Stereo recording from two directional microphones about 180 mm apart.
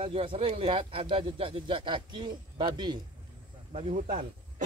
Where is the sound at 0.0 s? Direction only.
30° right (ahead or behind).